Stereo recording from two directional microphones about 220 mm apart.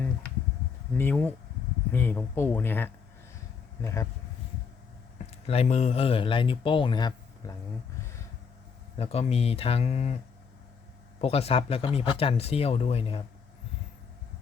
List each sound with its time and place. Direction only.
0.9 s speech: 10° left (ahead or behind)
5.2 s speech: 30° left (ahead or behind)
9.0 s speech: 25° left (ahead or behind)
11.2 s speech: 25° left (ahead or behind)